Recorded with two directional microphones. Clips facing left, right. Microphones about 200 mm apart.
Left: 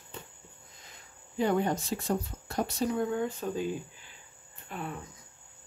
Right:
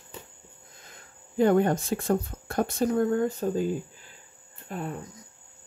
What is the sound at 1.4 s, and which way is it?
Speech, 55° right (ahead or behind).